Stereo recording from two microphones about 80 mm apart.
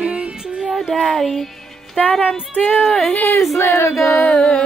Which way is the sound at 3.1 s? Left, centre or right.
Left.